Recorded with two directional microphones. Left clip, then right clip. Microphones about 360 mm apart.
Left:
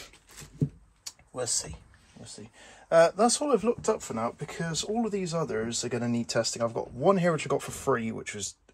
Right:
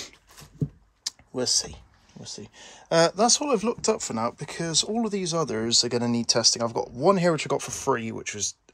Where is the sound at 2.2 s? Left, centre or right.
Right.